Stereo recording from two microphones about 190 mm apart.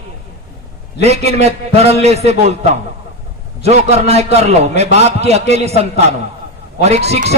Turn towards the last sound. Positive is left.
turn(degrees=-35)  # may be behind; listen again after turning